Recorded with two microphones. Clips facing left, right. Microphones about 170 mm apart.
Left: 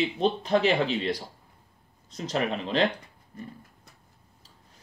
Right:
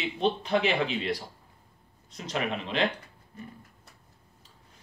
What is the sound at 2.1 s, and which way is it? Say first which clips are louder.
Speech: left 3 dB; 35° left (ahead or behind).